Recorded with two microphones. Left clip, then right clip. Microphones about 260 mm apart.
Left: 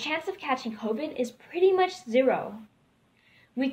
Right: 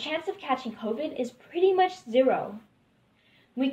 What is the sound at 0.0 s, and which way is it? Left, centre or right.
A woman's voice, left.